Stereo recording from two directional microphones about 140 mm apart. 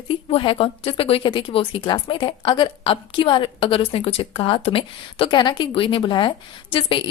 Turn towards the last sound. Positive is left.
turn(degrees=35)  # may be behind; listen again after turning